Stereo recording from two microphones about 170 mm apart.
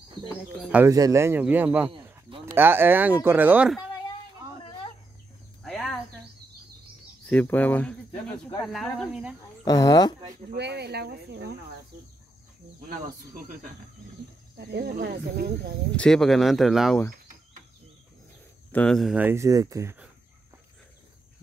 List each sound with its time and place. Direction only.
0.3 s speech: 10° left (ahead or behind)
0.7 s speech: 10° right (ahead or behind)
5.6 s a sound: centre (ahead or behind)
7.2 s speech: 10° left (ahead or behind)
9.7 s speech: 20° left (ahead or behind)
10.5 s speech: 75° right (ahead or behind)
14.6 s speech: 75° right (ahead or behind)
16.0 s speech: 5° left (ahead or behind)
18.7 s speech: 5° left (ahead or behind); by 20.0 s 15° right (ahead or behind)